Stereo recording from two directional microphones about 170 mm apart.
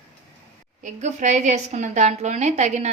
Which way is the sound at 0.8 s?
45° right (ahead or behind).